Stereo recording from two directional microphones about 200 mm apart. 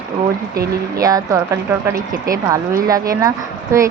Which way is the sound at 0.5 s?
15° right (ahead or behind).